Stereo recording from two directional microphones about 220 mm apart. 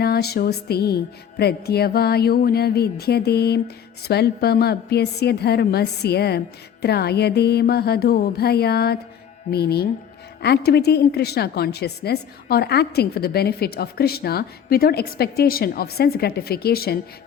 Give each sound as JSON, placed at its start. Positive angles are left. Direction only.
{"t": 0.0, "sound": "a woman's voice", "side_deg": 45}